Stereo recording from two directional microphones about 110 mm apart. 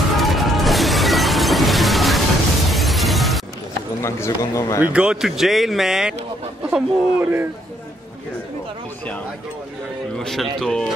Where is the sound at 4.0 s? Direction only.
25° left (ahead or behind).